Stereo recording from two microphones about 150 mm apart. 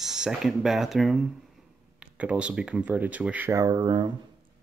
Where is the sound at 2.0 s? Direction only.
10° right (ahead or behind); by 4.1 s 30° right (ahead or behind).